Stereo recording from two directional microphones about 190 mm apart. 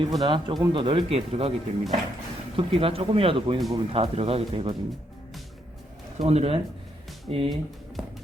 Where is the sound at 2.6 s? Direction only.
30° right (ahead or behind).